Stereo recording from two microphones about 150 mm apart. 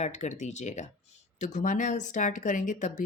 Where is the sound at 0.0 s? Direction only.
50° left (ahead or behind).